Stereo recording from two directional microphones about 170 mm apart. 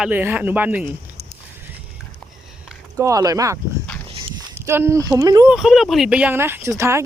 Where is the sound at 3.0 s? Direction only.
20° right (ahead or behind).